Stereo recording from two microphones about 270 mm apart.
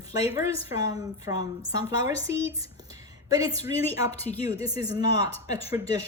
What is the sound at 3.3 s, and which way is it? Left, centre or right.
A woman's voice, centre.